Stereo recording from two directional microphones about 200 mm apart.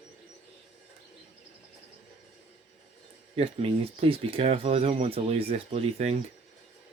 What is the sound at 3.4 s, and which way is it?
Speech, 30° right (ahead or behind).